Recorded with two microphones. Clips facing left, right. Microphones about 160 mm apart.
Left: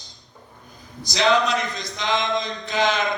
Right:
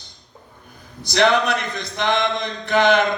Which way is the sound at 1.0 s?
60° right (ahead or behind).